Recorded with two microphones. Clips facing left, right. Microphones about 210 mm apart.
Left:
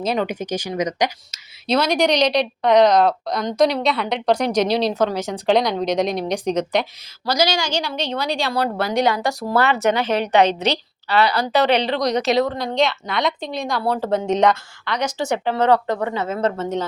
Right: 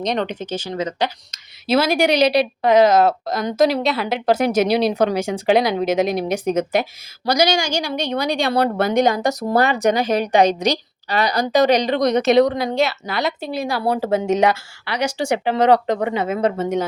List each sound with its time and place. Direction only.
0.0 s speech: 5° left (ahead or behind)
1.6 s a woman's voice: 5° right (ahead or behind)
8.4 s speech: 55° right (ahead or behind)
9.0 s a woman's voice: 45° right (ahead or behind)
9.2 s a woman's voice: 20° right (ahead or behind)
11.6 s a woman's voice: 45° right (ahead or behind)
12.5 s a woman's voice: 10° right (ahead or behind)